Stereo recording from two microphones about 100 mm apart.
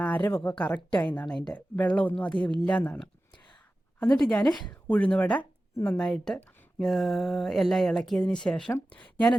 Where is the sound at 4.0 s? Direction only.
5° left (ahead or behind).